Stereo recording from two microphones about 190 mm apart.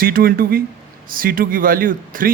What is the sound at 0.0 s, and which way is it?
A man's voice, 50° right (ahead or behind).